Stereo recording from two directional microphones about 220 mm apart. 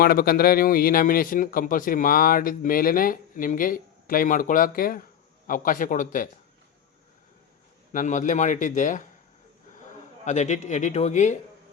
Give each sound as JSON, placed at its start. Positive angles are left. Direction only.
{"t": 0.0, "sound": "speech", "side_deg": 45}
{"t": 7.9, "sound": "speech", "side_deg": 35}
{"t": 10.2, "sound": "speech", "side_deg": 30}